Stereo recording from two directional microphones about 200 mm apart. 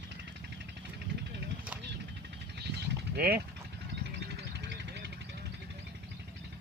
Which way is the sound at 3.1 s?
50° right (ahead or behind).